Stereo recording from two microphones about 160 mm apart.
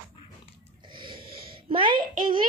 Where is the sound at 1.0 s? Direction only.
30° right (ahead or behind).